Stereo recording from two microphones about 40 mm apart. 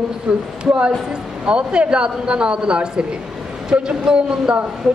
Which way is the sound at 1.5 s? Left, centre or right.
Right.